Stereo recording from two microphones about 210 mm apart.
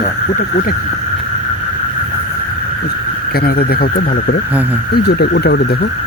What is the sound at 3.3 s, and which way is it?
Speech, 45° left (ahead or behind).